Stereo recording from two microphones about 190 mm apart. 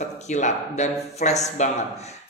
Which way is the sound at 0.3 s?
40° left (ahead or behind).